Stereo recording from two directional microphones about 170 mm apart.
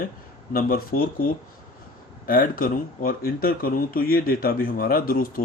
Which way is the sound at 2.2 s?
60° left (ahead or behind).